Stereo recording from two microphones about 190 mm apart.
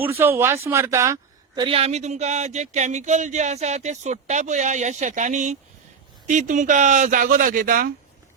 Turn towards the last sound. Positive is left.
turn(degrees=-45)  # may be behind; listen again after turning